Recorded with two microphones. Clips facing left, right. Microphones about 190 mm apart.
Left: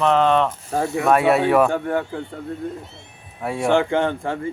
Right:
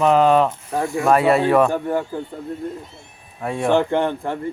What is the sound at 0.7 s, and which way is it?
Speech, 25° left (ahead or behind).